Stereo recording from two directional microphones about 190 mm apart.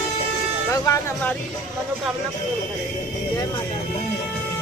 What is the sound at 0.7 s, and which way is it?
Speech, 15° left (ahead or behind).